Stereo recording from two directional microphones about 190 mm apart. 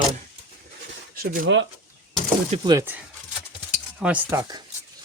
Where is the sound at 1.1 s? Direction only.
50° right (ahead or behind).